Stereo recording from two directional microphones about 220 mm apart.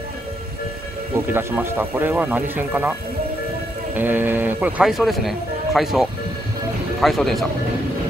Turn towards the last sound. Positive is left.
turn(degrees=0)  # may be behind; listen again after turning